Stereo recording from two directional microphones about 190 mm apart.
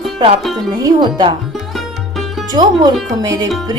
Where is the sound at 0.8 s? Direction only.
20° right (ahead or behind).